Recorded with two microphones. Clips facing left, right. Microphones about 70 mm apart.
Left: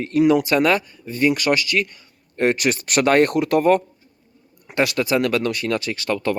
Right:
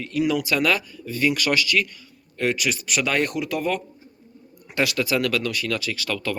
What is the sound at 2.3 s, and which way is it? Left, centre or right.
Speech, left.